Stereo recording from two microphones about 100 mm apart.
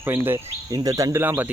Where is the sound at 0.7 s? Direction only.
35° right (ahead or behind).